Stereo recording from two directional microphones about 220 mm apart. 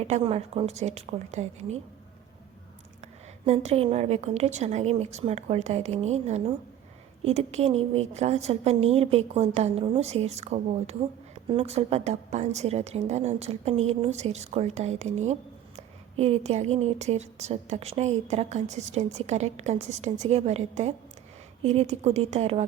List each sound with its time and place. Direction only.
0.1 s a woman's voice: 25° right (ahead or behind)
3.4 s a woman's voice: 30° right (ahead or behind)